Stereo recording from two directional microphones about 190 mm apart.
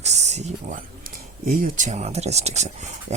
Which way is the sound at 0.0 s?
35° right (ahead or behind).